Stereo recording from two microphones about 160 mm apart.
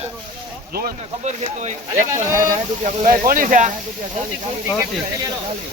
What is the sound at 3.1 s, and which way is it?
Speech, 60° right (ahead or behind).